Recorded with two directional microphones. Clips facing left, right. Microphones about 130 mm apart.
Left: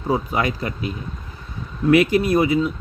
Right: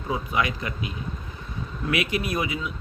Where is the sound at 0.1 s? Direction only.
40° left (ahead or behind).